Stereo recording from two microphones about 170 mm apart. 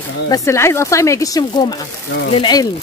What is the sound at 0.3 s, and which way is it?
Speech, 15° left (ahead or behind).